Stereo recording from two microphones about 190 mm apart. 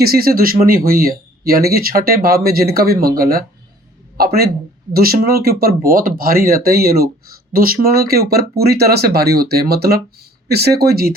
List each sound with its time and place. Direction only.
0.0 s speech: 50° right (ahead or behind)